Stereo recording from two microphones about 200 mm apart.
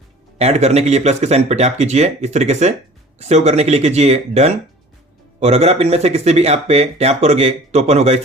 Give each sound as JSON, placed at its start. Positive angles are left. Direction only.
{"t": 0.3, "sound": "speech", "side_deg": -30}